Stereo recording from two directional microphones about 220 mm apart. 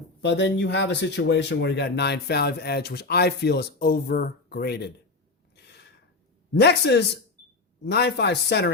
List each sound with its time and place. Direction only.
0.2 s speech: 50° left (ahead or behind)
6.5 s speech: 50° left (ahead or behind)